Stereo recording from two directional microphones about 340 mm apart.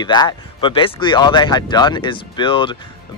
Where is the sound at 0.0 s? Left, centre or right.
Centre.